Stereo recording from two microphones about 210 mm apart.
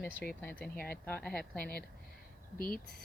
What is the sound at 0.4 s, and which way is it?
Speech, 5° left (ahead or behind).